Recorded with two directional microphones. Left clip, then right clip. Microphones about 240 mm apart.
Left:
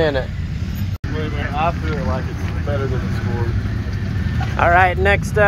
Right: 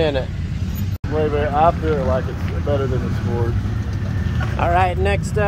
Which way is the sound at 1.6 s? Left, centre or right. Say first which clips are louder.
Right 4 dB; right.